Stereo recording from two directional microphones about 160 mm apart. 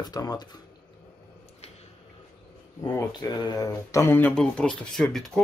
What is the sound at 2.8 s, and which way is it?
Speech, 25° left (ahead or behind).